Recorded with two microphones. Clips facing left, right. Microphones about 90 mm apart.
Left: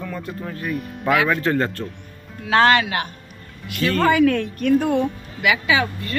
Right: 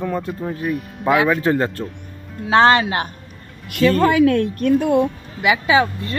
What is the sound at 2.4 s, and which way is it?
Speech, 30° right (ahead or behind).